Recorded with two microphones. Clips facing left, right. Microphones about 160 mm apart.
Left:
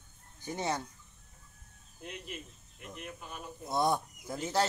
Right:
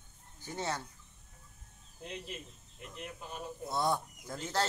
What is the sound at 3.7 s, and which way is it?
Speech, 15° left (ahead or behind).